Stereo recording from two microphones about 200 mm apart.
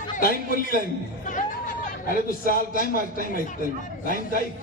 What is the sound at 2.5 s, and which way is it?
Speech, 45° left (ahead or behind).